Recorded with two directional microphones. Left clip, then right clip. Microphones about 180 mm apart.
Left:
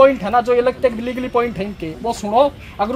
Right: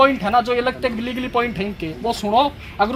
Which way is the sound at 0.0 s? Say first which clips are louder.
Left 3 dB; 5° left (ahead or behind).